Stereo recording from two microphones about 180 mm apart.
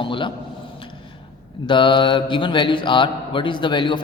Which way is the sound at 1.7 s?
25° left (ahead or behind).